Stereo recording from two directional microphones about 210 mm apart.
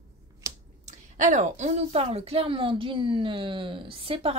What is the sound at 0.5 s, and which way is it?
Finger snapping, 15° right (ahead or behind).